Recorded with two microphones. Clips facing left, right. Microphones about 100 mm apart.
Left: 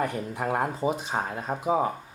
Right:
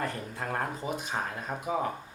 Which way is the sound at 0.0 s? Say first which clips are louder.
Left 6 dB; 15° left (ahead or behind).